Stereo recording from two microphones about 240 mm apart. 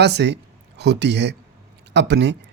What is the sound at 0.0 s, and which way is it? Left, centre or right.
Speech, right.